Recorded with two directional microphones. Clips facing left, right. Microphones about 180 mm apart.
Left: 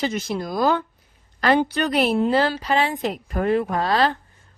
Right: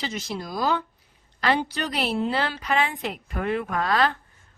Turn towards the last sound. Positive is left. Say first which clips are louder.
# left 3 dB
turn(degrees=30)  # may be behind; listen again after turning